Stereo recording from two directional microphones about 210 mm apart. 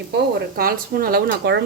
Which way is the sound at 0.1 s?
50° right (ahead or behind).